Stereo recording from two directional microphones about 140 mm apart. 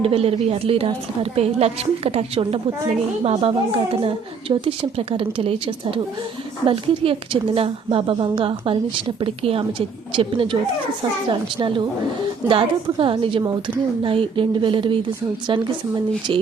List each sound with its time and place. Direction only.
0.0 s a woman's voice: 45° right (ahead or behind)